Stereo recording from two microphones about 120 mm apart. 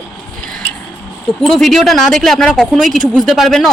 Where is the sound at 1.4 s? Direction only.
5° left (ahead or behind).